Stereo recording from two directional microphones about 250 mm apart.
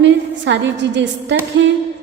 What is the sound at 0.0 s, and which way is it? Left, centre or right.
A woman's voice, right.